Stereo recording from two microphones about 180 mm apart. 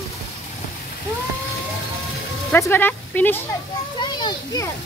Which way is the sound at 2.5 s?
10° left (ahead or behind).